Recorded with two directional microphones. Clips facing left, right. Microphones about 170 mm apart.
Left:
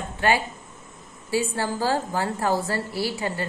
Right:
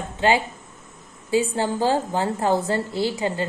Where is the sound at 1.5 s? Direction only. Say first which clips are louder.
Right 3 dB; 20° right (ahead or behind).